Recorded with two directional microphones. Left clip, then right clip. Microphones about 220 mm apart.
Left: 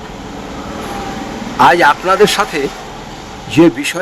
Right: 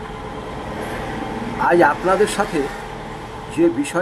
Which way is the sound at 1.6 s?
50° left (ahead or behind).